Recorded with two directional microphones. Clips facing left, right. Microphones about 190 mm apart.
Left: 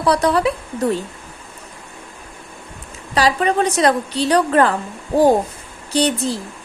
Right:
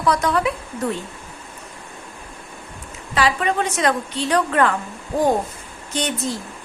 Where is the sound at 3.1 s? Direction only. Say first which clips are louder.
Left 3 dB; 35° left (ahead or behind).